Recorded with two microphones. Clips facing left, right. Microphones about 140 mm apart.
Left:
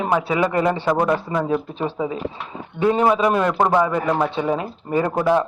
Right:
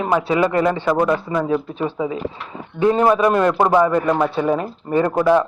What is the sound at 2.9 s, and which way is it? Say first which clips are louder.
Speech: right 2 dB; 10° left (ahead or behind).